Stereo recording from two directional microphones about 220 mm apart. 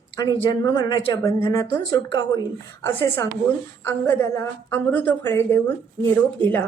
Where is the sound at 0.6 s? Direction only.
20° left (ahead or behind).